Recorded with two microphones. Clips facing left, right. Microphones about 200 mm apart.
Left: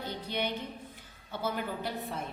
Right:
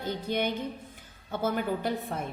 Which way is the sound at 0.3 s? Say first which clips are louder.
Right 5 dB; 45° right (ahead or behind).